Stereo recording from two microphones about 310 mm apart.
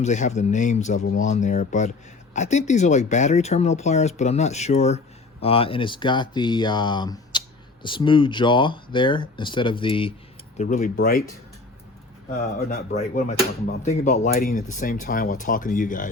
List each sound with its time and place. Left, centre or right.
0.0 s speech: left
12.4 s speech: left